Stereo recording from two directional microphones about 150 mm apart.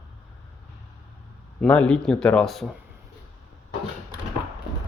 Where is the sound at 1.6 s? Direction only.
5° left (ahead or behind).